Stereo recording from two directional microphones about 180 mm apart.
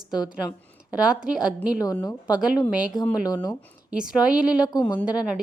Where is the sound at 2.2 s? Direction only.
5° right (ahead or behind).